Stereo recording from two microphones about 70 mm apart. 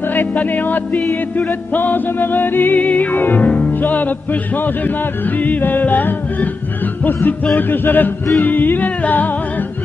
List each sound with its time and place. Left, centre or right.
0.1 s music: left
5.4 s music: left
7.5 s music: left